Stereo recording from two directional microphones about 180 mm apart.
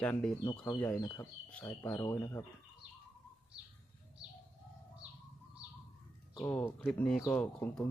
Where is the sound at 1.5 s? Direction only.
5° left (ahead or behind).